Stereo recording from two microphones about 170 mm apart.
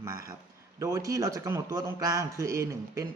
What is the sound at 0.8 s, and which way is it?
A man's voice, 20° right (ahead or behind).